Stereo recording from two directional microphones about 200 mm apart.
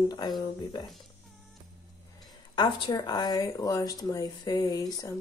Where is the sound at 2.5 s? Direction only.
25° left (ahead or behind).